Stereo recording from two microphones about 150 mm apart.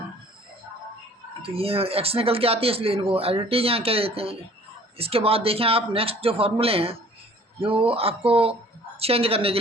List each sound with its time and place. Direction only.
1.4 s speech: 40° right (ahead or behind)